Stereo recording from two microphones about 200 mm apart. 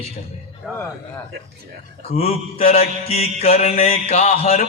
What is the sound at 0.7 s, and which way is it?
Speech, centre (ahead or behind).